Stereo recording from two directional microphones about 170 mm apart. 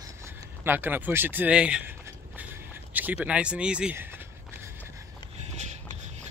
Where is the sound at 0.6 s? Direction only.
10° right (ahead or behind).